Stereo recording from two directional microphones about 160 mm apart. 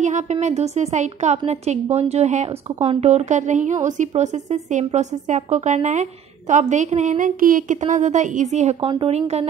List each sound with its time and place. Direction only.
0.0 s speech: 45° right (ahead or behind)